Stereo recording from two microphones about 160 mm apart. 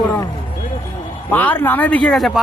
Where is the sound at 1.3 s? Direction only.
10° left (ahead or behind).